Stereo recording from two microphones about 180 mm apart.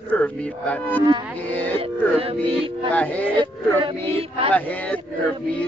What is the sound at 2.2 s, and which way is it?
Music, 30° right (ahead or behind).